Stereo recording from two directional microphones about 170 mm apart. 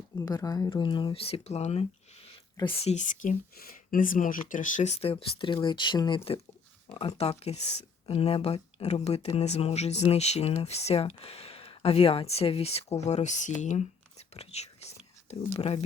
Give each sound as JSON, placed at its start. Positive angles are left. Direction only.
{"t": 0.2, "sound": "speech", "side_deg": 20}
{"t": 14.3, "sound": "whispering", "side_deg": 40}